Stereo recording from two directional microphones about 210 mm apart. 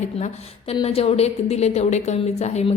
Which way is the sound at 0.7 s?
25° left (ahead or behind).